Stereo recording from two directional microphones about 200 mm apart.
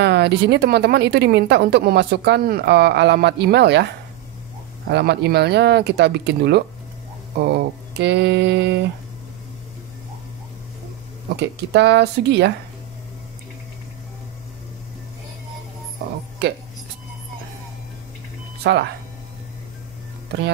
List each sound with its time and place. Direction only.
0.0 s a woman's voice: 55° right (ahead or behind)
4.8 s a woman's voice: 55° right (ahead or behind)
11.3 s a woman's voice: 60° right (ahead or behind)
18.6 s speech: 55° right (ahead or behind)